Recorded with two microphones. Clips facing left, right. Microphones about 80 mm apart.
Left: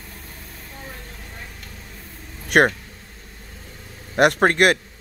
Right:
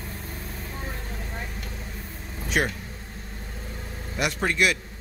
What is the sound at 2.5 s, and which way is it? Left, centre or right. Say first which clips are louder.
Speech: left 10 dB; left.